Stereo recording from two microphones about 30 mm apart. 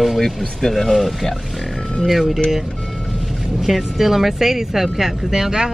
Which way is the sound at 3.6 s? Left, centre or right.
Centre.